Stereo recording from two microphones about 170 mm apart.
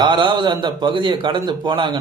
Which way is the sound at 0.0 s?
25° right (ahead or behind).